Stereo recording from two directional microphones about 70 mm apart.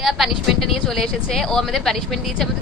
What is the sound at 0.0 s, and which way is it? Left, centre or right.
Speech, centre.